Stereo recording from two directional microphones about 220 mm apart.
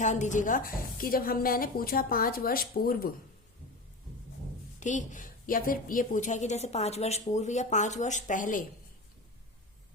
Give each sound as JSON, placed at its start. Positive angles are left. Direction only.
{"t": 0.0, "sound": "a woman's voice", "side_deg": 35}
{"t": 4.8, "sound": "a woman's voice", "side_deg": 35}